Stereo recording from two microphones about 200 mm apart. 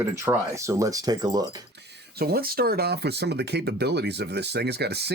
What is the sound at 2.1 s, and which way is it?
Speech, 50° right (ahead or behind).